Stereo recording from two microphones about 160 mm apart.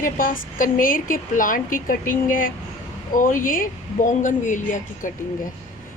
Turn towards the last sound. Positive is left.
turn(degrees=55)  # may be behind; listen again after turning